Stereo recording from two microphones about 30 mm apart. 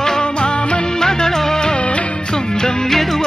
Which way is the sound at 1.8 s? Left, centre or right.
Left.